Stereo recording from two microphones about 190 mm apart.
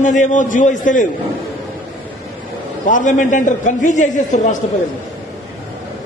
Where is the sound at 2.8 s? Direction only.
40° left (ahead or behind).